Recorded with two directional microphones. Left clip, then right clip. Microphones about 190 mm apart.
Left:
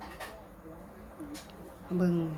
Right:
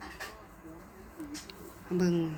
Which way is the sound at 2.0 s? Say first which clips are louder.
Right 1 dB; 15° left (ahead or behind).